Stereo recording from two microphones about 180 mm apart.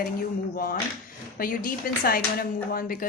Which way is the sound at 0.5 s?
55° left (ahead or behind).